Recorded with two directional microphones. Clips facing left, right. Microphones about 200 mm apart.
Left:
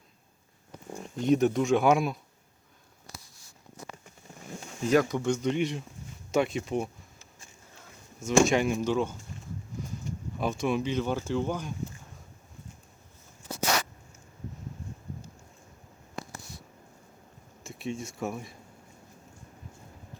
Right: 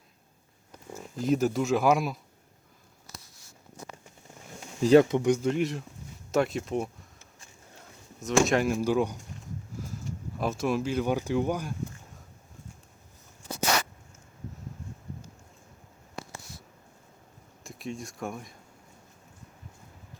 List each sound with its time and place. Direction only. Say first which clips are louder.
0.9 s speech: left 2 dB; 5° right (ahead or behind)
4.8 s speech: right 6 dB; 30° right (ahead or behind); by 5.5 s 15° right (ahead or behind)
5.5 s speech: right 1 dB; centre (ahead or behind)
8.2 s speech: left 1 dB; centre (ahead or behind)
9.8 s a sound: left 1 dB; 5° right (ahead or behind)
10.3 s speech: even; centre (ahead or behind)
17.6 s speech: left 2 dB; centre (ahead or behind)